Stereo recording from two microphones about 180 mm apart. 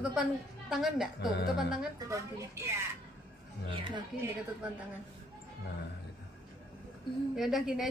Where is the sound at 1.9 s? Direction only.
15° right (ahead or behind).